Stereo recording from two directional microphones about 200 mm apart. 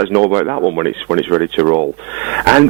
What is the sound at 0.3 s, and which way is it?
Speech, 15° right (ahead or behind).